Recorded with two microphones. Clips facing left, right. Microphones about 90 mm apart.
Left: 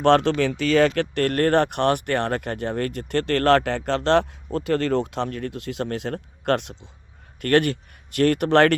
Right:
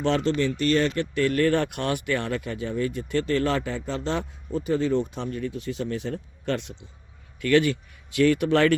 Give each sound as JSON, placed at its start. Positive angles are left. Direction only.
{"t": 0.0, "sound": "speech", "side_deg": 80}
{"t": 7.4, "sound": "speech", "side_deg": 55}